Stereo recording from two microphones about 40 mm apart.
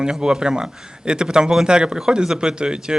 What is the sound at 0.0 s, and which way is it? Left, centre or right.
A man's voice, right.